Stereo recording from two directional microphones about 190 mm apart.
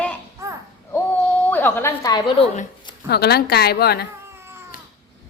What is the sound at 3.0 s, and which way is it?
A woman's voice, 55° left (ahead or behind).